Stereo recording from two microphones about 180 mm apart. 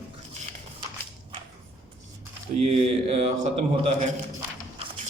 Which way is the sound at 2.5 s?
35° right (ahead or behind).